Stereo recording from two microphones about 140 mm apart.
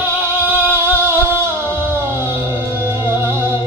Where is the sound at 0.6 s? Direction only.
15° right (ahead or behind).